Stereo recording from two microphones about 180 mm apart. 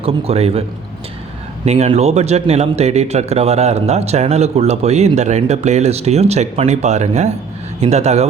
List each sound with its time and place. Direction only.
0.0 s speech: 35° right (ahead or behind)
1.6 s speech: 35° right (ahead or behind)